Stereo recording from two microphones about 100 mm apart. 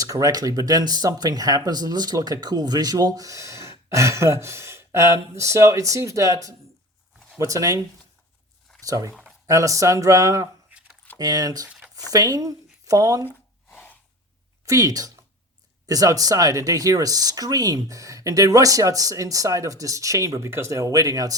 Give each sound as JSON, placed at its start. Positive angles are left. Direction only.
{"t": 0.0, "sound": "speech", "side_deg": -35}
{"t": 8.8, "sound": "speech", "side_deg": -35}
{"t": 13.7, "sound": "gasp", "side_deg": 15}
{"t": 14.6, "sound": "speech", "side_deg": -35}